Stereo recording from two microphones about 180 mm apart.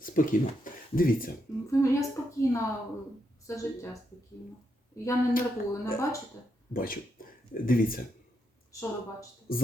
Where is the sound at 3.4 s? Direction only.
15° left (ahead or behind).